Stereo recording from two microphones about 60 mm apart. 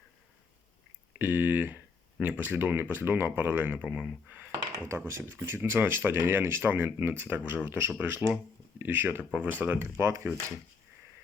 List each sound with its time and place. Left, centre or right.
1.2 s speech: right
4.9 s speech: right
10.0 s speech: right